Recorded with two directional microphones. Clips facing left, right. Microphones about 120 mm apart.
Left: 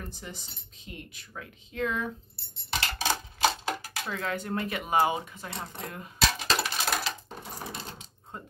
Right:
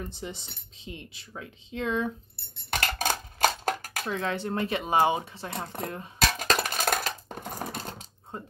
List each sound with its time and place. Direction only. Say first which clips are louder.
0.1 s speech: right 5 dB; 25° right (ahead or behind)
2.3 s dishes: right 2 dB; 55° right (ahead or behind)
4.1 s speech: right 2 dB; 25° right (ahead or behind)
5.5 s speech: right 5 dB; 45° right (ahead or behind)
6.1 s coin: right 1 dB; 45° right (ahead or behind)